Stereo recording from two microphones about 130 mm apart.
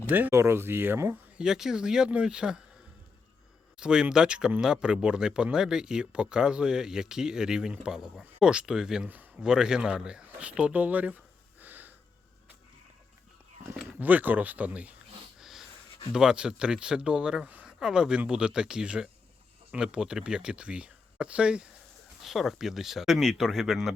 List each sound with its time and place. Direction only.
0.1 s speech: 15° right (ahead or behind)
1.4 s speech: 5° right (ahead or behind)
3.8 s speech: 5° right (ahead or behind)
11.6 s wheeze: 15° right (ahead or behind)
14.0 s speech: 15° right (ahead or behind)
15.4 s wheeze: centre (ahead or behind)
16.1 s speech: 5° right (ahead or behind)